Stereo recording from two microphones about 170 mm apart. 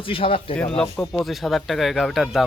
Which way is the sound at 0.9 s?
5° left (ahead or behind).